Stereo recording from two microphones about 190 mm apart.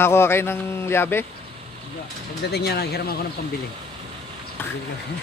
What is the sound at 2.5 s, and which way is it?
Speech, 55° left (ahead or behind).